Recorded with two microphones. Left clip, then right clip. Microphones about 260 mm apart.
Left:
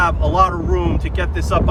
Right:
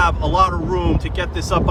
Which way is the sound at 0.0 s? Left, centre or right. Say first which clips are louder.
Left 1 dB; centre.